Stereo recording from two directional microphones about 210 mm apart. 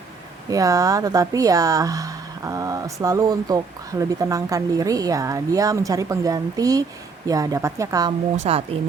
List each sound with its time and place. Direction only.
0.5 s speech: 15° right (ahead or behind)
8.4 s speech: 30° right (ahead or behind)